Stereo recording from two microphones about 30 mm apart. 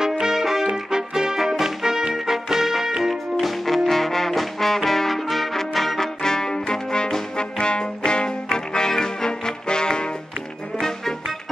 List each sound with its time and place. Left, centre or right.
0.2 s music: centre
3.6 s music: centre
5.9 s music: left